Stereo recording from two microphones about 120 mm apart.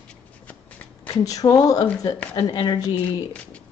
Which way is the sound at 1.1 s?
30° left (ahead or behind).